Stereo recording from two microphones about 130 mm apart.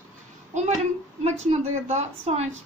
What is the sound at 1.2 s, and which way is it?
A woman's voice, 60° right (ahead or behind).